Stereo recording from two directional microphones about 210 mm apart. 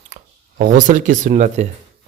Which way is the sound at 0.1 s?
35° right (ahead or behind).